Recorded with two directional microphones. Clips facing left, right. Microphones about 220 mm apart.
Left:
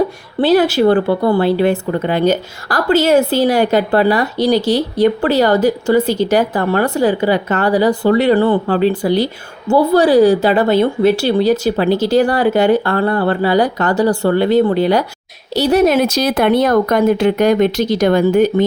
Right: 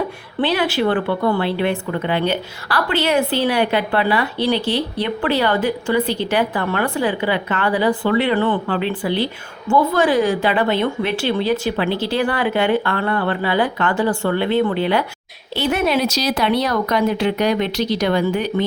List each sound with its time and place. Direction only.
0.3 s a woman's voice: 40° left (ahead or behind)